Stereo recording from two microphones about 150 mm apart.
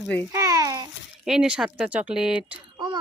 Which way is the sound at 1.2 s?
5° right (ahead or behind).